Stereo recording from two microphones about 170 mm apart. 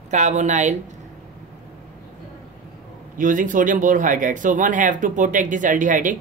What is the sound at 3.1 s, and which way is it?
Speech, 50° right (ahead or behind).